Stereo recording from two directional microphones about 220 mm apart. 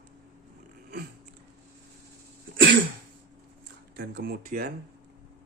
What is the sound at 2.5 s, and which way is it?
Cough, 50° right (ahead or behind).